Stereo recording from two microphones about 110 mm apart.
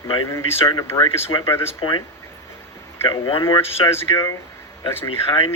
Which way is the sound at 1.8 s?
45° left (ahead or behind).